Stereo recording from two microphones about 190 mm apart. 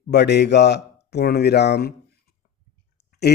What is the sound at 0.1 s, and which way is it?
Speech, 65° left (ahead or behind).